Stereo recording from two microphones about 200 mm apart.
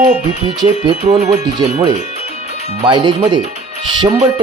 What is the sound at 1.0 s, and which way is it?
Speech, 35° right (ahead or behind).